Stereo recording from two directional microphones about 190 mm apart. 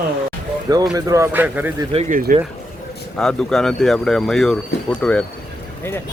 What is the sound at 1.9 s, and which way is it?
Speech, 40° right (ahead or behind).